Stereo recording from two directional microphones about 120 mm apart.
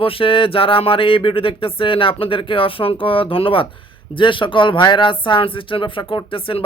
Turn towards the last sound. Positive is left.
turn(degrees=50)  # may be behind; listen again after turning